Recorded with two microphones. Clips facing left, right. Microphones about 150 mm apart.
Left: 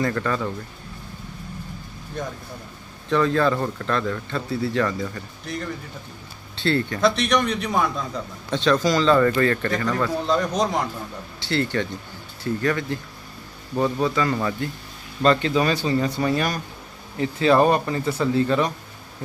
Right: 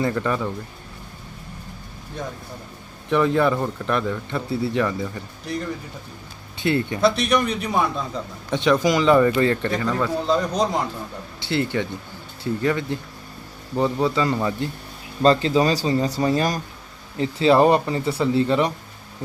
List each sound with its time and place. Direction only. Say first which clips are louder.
0.0 s speech: right 1 dB; 15° right (ahead or behind)
3.1 s speech: right 1 dB; 15° right (ahead or behind)
6.6 s speech: right 1 dB; 20° right (ahead or behind)
7.0 s speech: right 1 dB; 5° right (ahead or behind)
8.4 s speech: right 1 dB; 15° right (ahead or behind); by 10.7 s centre (ahead or behind)
11.4 s speech: even; 20° right (ahead or behind)
15.2 s speech: right 2 dB; 30° right (ahead or behind)
16.2 s speech: right 2 dB; 25° right (ahead or behind)